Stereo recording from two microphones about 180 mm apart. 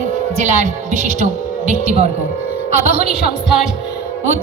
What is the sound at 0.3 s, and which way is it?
A woman's voice, 45° right (ahead or behind).